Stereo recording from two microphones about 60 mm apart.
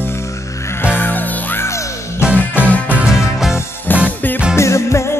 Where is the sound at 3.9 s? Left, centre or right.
Left.